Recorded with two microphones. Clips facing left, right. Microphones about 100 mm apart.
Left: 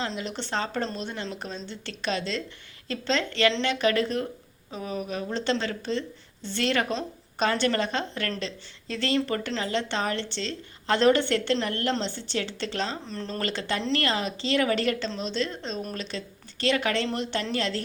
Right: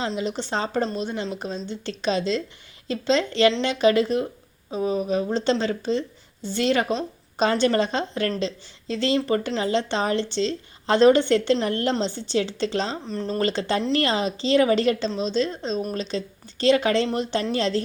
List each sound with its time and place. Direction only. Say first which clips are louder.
0.2 s a woman's voice: right 4 dB; 15° right (ahead or behind)
13.1 s speech: right 6 dB; 5° right (ahead or behind)
13.4 s a woman's voice: right 6 dB; 25° right (ahead or behind)
17.1 s a woman's voice: right 4 dB; 10° right (ahead or behind)